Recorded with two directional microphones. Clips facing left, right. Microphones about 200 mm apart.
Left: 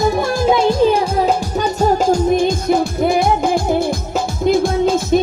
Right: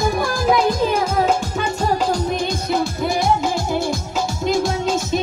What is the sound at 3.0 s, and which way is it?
Music, 55° left (ahead or behind).